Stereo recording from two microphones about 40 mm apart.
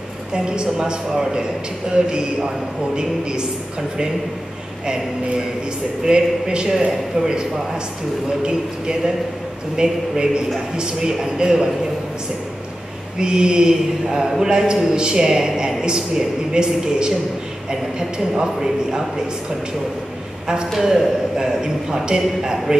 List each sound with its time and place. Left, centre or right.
0.3 s speech: right
6.0 s a man's voice: centre
13.2 s a man's voice: right
20.8 s a man's voice: centre